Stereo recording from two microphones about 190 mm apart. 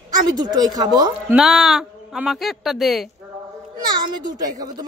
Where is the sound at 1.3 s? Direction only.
Centre (ahead or behind).